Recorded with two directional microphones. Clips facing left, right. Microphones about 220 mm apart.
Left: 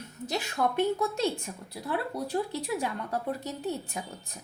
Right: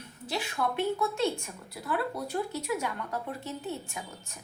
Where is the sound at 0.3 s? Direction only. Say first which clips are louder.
Left 2 dB; 40° left (ahead or behind).